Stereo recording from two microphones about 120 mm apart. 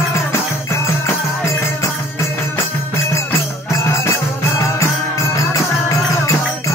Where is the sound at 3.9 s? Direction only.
25° left (ahead or behind).